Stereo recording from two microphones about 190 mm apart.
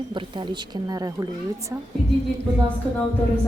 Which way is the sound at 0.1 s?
25° right (ahead or behind).